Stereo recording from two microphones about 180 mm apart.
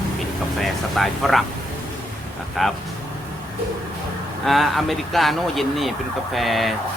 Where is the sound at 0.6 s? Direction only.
Centre (ahead or behind).